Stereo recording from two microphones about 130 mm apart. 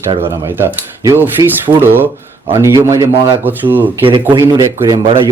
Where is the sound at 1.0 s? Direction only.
20° right (ahead or behind).